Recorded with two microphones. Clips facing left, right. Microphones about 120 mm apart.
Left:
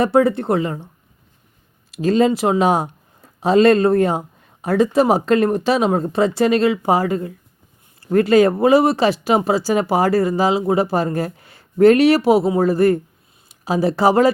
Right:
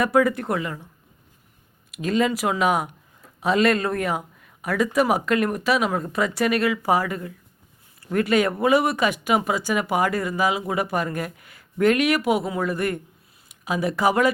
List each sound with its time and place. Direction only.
0.0 s speech: 30° left (ahead or behind)
1.9 s speech: 30° left (ahead or behind)